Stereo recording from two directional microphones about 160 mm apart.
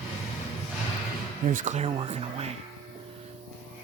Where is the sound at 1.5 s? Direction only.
50° right (ahead or behind).